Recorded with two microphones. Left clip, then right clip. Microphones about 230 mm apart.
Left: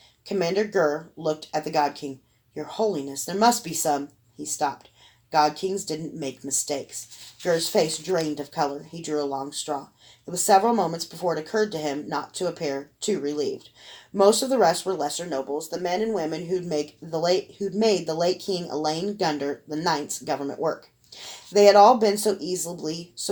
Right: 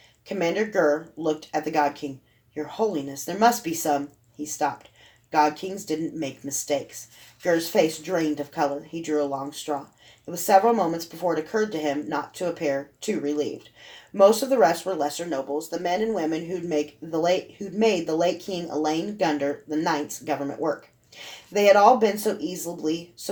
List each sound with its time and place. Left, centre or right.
0.3 s speech: left